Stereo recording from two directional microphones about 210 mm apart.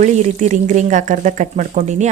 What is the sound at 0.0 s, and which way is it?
Speech, 35° right (ahead or behind).